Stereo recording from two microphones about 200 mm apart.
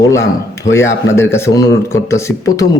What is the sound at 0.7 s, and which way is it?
Speech, 65° left (ahead or behind).